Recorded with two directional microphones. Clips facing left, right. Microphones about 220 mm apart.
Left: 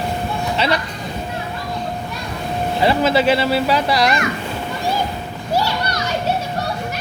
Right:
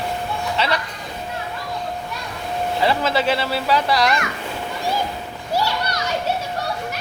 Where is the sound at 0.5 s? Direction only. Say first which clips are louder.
Left 3 dB; 15° left (ahead or behind).